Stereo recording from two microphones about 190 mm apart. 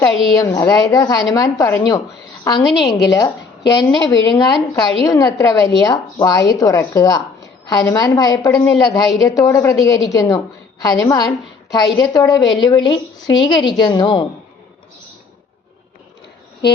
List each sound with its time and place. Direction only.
0.0 s a woman's voice: 20° left (ahead or behind)